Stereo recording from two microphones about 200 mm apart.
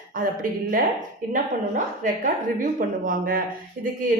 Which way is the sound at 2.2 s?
40° right (ahead or behind).